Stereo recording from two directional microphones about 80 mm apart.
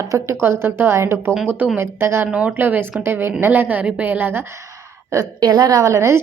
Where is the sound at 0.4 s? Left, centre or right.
Right.